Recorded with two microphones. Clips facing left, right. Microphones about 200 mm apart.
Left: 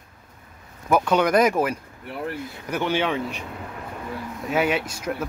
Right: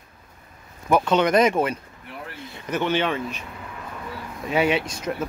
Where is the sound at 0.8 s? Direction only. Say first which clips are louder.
Even; 5° left (ahead or behind).